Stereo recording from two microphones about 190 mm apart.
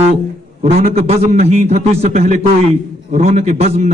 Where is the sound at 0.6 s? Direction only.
35° right (ahead or behind).